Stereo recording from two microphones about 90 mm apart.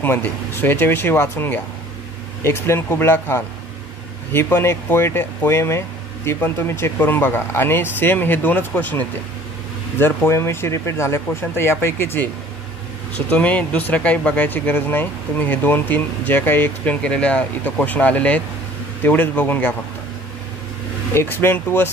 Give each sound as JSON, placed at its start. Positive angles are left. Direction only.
{"t": 0.0, "sound": "speech", "side_deg": 25}
{"t": 13.3, "sound": "speech", "side_deg": 15}
{"t": 21.1, "sound": "speech", "side_deg": 30}